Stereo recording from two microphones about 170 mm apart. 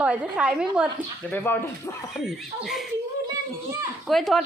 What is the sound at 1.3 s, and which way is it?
Speech, 10° left (ahead or behind).